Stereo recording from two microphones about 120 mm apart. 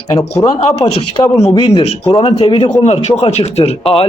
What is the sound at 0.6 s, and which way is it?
Speech, 60° left (ahead or behind).